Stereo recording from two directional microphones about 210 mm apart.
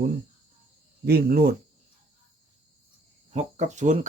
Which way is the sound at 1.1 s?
45° right (ahead or behind).